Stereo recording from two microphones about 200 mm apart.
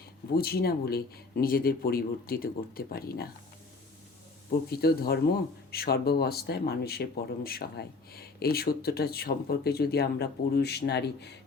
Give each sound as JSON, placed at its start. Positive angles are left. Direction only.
{"t": 0.3, "sound": "speech", "side_deg": 50}
{"t": 4.7, "sound": "speech", "side_deg": 50}